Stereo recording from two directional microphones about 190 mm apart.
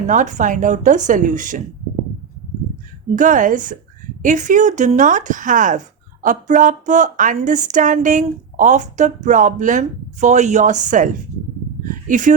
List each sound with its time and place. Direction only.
0.1 s speech: 40° right (ahead or behind)
3.2 s a woman's voice: 45° right (ahead or behind)